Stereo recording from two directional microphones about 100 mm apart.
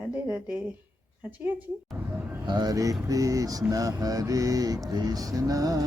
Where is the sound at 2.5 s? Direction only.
45° right (ahead or behind).